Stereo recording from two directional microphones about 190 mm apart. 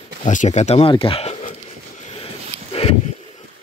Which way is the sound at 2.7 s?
30° left (ahead or behind).